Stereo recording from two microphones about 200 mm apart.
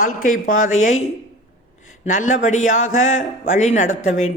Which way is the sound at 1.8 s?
40° left (ahead or behind).